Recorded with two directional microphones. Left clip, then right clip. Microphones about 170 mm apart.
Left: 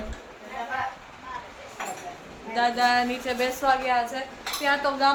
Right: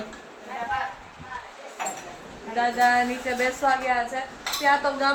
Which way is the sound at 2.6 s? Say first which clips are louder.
Right 1 dB; 20° left (ahead or behind).